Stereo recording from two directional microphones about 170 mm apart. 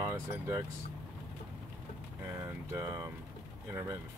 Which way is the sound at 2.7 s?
15° right (ahead or behind).